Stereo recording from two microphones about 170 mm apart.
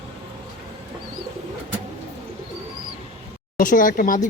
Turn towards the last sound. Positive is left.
turn(degrees=50)  # may be behind; listen again after turning